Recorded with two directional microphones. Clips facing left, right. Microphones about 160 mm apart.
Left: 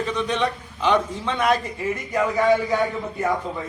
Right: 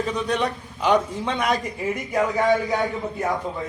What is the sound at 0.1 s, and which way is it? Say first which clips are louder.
A man's voice: even; 10° right (ahead or behind).